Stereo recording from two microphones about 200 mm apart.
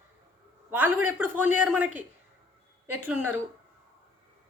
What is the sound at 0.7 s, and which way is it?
A woman's voice, 10° right (ahead or behind).